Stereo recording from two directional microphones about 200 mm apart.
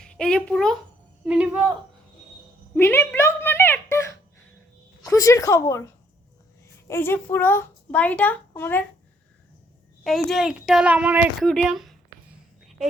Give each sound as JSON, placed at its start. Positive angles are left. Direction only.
{"t": 0.0, "sound": "a child's voice", "side_deg": 5}
{"t": 2.7, "sound": "a woman's voice", "side_deg": 10}
{"t": 6.8, "sound": "a woman's voice", "side_deg": 10}
{"t": 10.0, "sound": "speech", "side_deg": 0}